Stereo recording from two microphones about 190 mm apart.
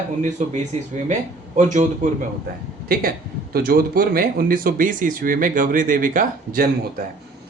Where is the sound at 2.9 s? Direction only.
50° right (ahead or behind).